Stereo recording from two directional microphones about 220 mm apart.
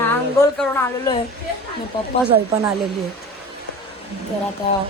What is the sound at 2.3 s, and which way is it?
Speech, 15° right (ahead or behind).